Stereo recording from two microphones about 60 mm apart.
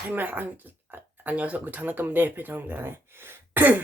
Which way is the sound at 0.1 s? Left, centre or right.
Right.